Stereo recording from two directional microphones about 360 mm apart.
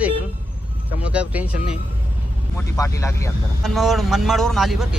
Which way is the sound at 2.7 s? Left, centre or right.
Centre.